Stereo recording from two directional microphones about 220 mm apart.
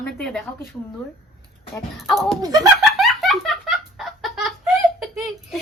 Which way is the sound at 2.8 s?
Centre (ahead or behind).